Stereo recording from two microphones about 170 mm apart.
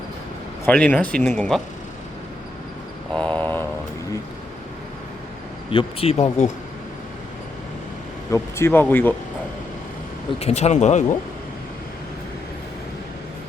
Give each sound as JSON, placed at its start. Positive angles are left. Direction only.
{"t": 0.6, "sound": "speech", "side_deg": 10}
{"t": 3.2, "sound": "a sound", "side_deg": 10}
{"t": 5.7, "sound": "speech", "side_deg": 35}
{"t": 8.3, "sound": "speech", "side_deg": 15}
{"t": 10.4, "sound": "speech", "side_deg": 40}